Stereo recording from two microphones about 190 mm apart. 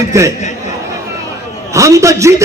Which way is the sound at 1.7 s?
15° right (ahead or behind).